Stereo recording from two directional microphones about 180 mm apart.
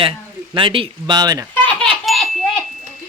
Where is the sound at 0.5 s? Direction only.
30° right (ahead or behind).